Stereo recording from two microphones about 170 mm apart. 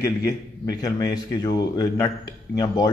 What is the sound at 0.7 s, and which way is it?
A man's voice, 20° left (ahead or behind).